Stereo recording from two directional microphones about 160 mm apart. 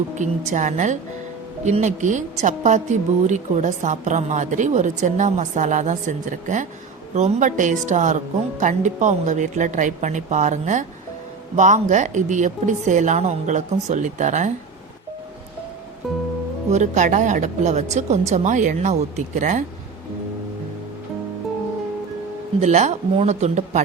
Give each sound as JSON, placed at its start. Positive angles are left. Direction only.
{"t": 0.2, "sound": "a woman's voice", "side_deg": -50}
{"t": 16.7, "sound": "a woman's voice", "side_deg": -50}
{"t": 22.6, "sound": "a woman's voice", "side_deg": -45}